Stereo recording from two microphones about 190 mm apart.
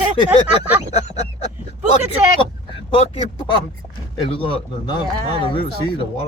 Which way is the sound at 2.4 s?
25° left (ahead or behind).